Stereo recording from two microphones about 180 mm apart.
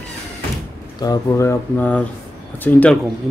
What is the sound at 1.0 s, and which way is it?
Speech, 20° left (ahead or behind).